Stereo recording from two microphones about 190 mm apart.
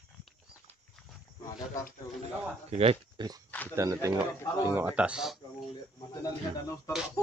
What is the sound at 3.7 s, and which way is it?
A man's voice, 15° right (ahead or behind).